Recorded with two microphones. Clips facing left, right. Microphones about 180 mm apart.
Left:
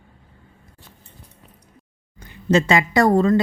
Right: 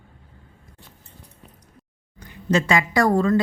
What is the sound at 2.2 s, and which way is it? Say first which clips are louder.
A woman's voice: left 3 dB; 25° left (ahead or behind).